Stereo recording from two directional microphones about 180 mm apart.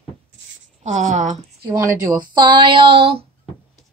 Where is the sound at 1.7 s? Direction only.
20° right (ahead or behind).